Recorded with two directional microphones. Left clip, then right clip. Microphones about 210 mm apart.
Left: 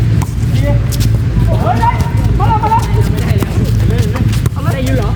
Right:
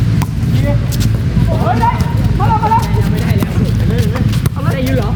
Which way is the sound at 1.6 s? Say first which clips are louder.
Left 1 dB; 5° left (ahead or behind).